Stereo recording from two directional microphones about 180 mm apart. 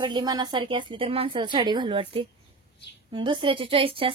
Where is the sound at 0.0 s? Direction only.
25° right (ahead or behind).